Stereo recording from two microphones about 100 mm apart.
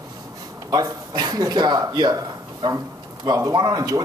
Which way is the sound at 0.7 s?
45° right (ahead or behind).